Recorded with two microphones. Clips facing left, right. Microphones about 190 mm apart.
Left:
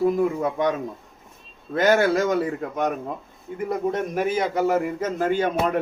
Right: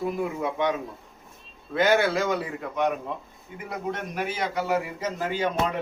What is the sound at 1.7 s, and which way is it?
A man's voice, 45° left (ahead or behind).